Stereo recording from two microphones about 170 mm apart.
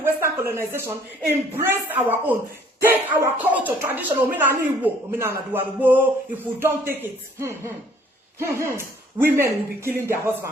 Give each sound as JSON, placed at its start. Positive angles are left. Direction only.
{"t": 0.0, "sound": "speech", "side_deg": -15}